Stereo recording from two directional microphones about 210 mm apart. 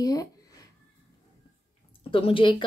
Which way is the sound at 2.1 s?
25° left (ahead or behind).